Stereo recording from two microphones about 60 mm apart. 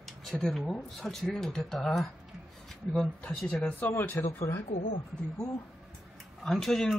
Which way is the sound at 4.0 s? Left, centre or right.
Left.